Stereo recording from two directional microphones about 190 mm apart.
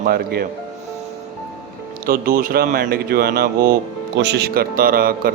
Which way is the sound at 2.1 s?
50° right (ahead or behind).